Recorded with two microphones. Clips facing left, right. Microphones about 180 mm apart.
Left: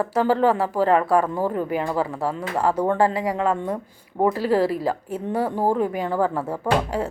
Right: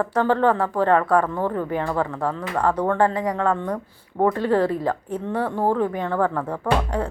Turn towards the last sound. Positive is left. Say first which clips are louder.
# even
turn(degrees=10)  # may be behind; listen again after turning